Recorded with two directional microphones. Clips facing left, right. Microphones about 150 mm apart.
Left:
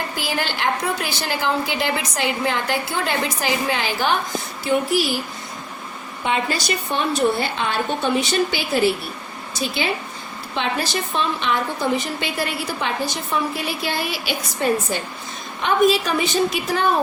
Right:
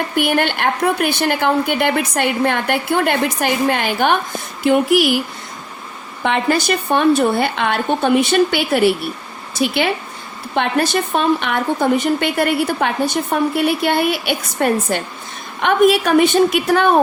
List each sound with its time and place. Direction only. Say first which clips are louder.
0.2 s a woman's voice: right 9 dB; 60° right (ahead or behind)
6.2 s a woman's voice: right 6 dB; 60° right (ahead or behind)